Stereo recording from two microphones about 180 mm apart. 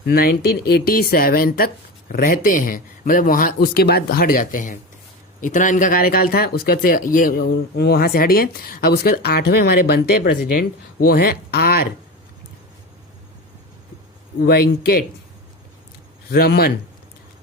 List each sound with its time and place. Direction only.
0.0 s speech: 60° left (ahead or behind)
14.4 s speech: 60° left (ahead or behind)
16.3 s speech: 60° left (ahead or behind)